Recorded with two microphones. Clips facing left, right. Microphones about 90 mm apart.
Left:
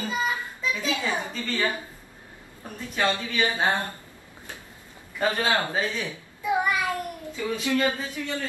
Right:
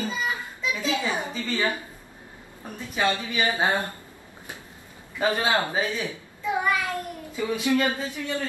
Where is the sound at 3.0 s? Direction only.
20° right (ahead or behind).